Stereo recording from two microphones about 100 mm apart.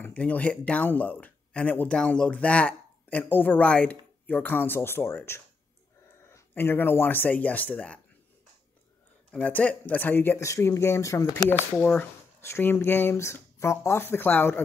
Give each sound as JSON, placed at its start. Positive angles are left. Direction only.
{"t": 0.0, "sound": "speech", "side_deg": 15}
{"t": 9.3, "sound": "speech", "side_deg": 15}
{"t": 12.4, "sound": "speech", "side_deg": 25}